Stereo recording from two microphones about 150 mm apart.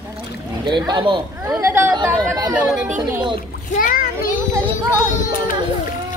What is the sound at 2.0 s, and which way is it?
Speech, 25° right (ahead or behind).